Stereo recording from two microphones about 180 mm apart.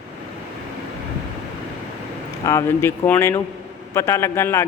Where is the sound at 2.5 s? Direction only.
15° left (ahead or behind).